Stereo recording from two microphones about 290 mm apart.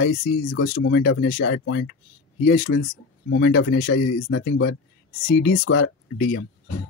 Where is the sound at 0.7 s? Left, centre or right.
Left.